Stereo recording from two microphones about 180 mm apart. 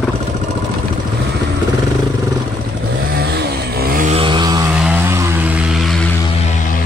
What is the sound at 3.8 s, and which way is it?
Vehicle, 50° right (ahead or behind).